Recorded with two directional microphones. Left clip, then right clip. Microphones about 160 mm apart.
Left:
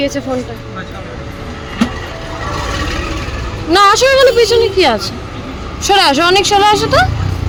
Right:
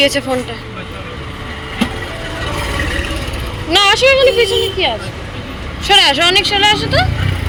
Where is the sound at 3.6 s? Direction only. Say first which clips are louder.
Left 2 dB; 40° left (ahead or behind); by 5.1 s 70° left (ahead or behind).